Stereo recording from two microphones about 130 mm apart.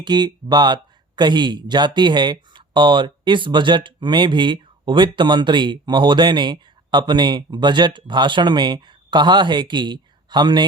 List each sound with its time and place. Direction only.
0.0 s speech: 35° right (ahead or behind)